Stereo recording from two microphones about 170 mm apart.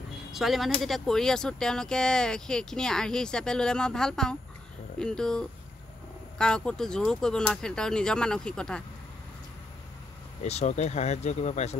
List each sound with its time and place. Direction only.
0.3 s speech: centre (ahead or behind)
10.4 s speech: 40° left (ahead or behind)